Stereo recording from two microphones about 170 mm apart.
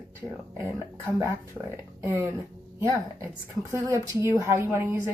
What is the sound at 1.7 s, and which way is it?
A woman's voice, 15° right (ahead or behind).